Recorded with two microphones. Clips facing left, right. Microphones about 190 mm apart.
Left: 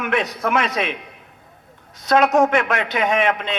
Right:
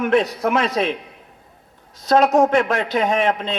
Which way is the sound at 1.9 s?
30° right (ahead or behind).